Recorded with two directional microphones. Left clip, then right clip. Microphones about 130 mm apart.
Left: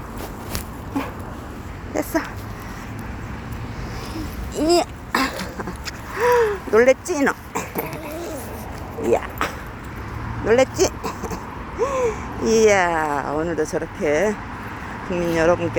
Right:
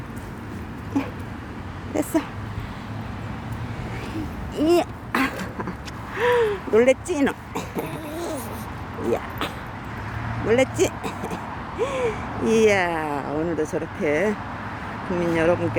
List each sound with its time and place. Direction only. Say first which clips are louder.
1.9 s speech: left 1 dB; 25° right (ahead or behind)
4.5 s a sound: left 2 dB; 5° right (ahead or behind)
6.1 s throat clearing: left 3 dB; 10° right (ahead or behind)
9.1 s speech: left 6 dB; 5° left (ahead or behind)
10.4 s a sound: left 3 dB; 5° right (ahead or behind)
13.5 s speech: left 2 dB; 10° right (ahead or behind)